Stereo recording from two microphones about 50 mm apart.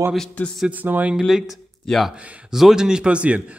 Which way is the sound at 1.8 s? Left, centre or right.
Centre.